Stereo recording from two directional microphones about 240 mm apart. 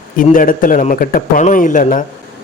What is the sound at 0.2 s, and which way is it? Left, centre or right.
Speech, left.